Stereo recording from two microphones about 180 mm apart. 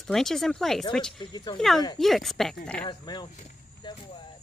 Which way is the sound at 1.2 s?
25° left (ahead or behind).